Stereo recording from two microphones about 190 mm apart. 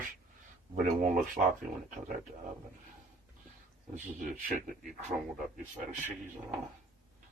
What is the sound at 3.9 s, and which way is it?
Speech, 45° right (ahead or behind).